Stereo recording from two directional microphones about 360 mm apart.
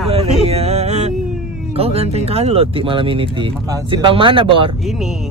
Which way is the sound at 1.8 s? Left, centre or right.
Centre.